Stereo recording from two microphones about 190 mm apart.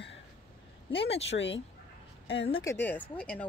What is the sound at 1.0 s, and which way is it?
Speech, 70° left (ahead or behind).